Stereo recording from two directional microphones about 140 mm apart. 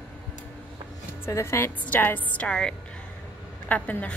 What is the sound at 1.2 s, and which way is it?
A woman's voice, 20° left (ahead or behind).